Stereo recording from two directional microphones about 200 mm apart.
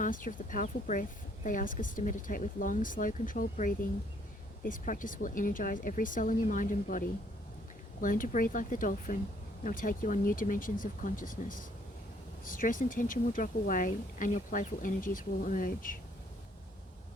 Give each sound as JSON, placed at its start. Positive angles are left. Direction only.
{"t": 0.0, "sound": "speech", "side_deg": 40}
{"t": 8.0, "sound": "speech", "side_deg": 40}